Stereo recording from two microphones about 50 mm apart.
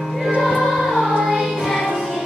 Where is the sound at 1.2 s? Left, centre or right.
Centre.